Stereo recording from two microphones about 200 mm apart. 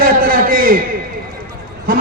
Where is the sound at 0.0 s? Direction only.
45° right (ahead or behind).